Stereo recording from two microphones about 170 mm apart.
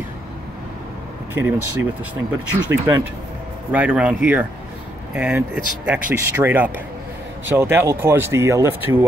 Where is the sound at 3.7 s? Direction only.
5° right (ahead or behind).